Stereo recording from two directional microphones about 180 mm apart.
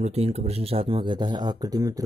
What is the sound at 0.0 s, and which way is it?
Speech, 35° right (ahead or behind).